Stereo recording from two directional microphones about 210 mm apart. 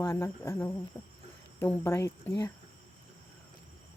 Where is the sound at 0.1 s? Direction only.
10° left (ahead or behind).